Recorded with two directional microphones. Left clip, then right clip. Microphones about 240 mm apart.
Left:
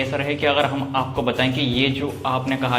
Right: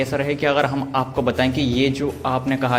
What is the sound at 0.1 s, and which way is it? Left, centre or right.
A man's voice, right.